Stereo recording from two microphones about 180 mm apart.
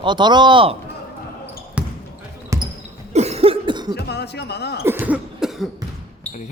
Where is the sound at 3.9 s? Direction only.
65° left (ahead or behind).